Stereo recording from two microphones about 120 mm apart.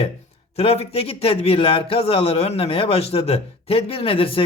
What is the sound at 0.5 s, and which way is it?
A man's voice, 60° left (ahead or behind).